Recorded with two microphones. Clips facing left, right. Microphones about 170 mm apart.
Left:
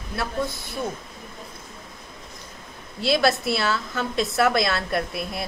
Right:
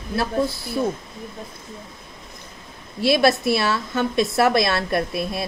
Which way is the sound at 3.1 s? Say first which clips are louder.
Right 4 dB; 20° right (ahead or behind).